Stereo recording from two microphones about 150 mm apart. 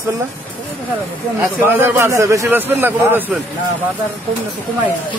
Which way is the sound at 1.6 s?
15° right (ahead or behind).